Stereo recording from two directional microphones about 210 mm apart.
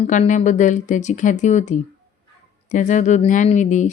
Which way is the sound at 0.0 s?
35° left (ahead or behind).